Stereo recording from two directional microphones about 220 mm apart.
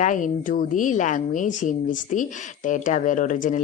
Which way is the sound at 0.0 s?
35° left (ahead or behind).